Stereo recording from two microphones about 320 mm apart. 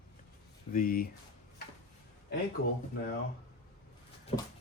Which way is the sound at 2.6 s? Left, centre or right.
Left.